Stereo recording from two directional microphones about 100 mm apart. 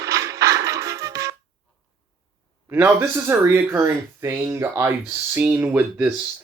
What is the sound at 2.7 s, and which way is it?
Speech, 25° right (ahead or behind).